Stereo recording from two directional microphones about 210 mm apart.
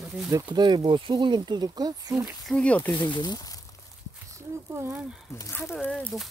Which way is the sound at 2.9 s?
20° left (ahead or behind).